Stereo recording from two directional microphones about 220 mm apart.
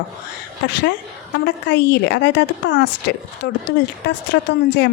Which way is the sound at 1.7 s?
50° left (ahead or behind).